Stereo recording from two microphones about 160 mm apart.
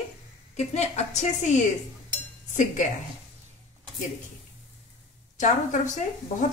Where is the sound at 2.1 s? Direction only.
50° left (ahead or behind).